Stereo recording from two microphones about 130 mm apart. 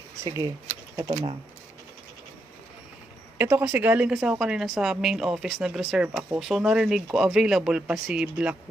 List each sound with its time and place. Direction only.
0.3 s speech: 25° right (ahead or behind)
3.3 s a woman's voice: 15° right (ahead or behind)